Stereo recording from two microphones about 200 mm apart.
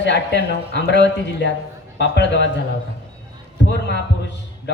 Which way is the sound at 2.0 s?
65° left (ahead or behind).